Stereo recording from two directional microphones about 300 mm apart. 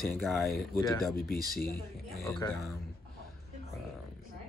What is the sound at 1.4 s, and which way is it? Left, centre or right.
Speech, left.